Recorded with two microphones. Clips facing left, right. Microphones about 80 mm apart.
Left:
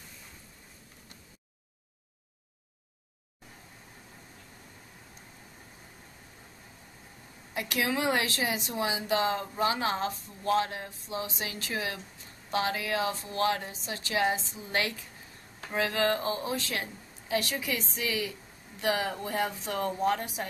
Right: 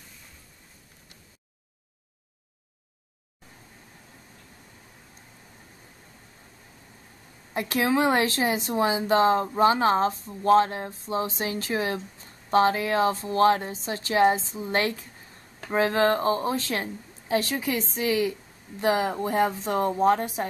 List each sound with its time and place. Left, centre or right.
7.5 s a woman's voice: right